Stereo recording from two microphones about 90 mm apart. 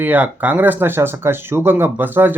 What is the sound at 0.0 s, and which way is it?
Speech, 20° right (ahead or behind).